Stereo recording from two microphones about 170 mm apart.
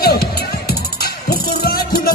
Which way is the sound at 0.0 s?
65° left (ahead or behind).